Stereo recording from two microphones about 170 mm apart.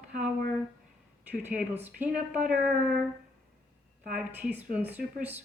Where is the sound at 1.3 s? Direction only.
10° right (ahead or behind).